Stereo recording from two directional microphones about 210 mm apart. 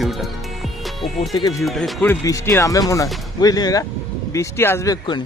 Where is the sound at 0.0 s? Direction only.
Centre (ahead or behind).